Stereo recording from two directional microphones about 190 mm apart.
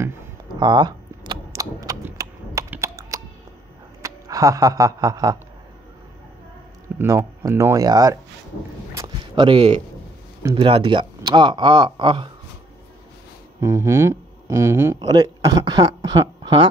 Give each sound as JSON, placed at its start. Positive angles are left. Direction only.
{"t": 0.6, "sound": "cap gun", "side_deg": -25}
{"t": 4.0, "sound": "speech", "side_deg": -15}
{"t": 7.0, "sound": "speech", "side_deg": -15}
{"t": 8.9, "sound": "a sound", "side_deg": -20}
{"t": 10.4, "sound": "speech", "side_deg": -25}
{"t": 13.6, "sound": "speech", "side_deg": -15}